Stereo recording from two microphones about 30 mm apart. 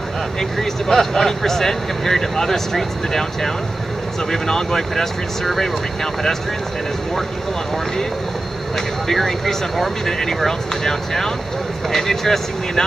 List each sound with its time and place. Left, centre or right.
0.4 s speech: centre
8.7 s speech: centre